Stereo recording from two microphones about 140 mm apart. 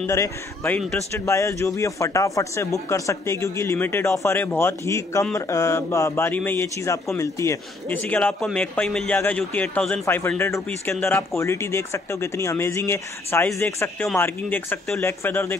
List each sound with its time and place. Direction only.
0.0 s a man's voice: 20° left (ahead or behind)